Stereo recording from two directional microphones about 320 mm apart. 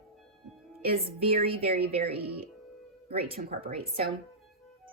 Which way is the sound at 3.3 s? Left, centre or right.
Right.